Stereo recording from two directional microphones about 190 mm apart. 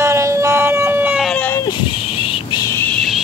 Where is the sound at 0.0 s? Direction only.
15° right (ahead or behind).